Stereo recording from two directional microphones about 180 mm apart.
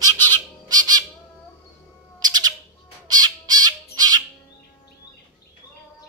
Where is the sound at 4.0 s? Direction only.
20° right (ahead or behind).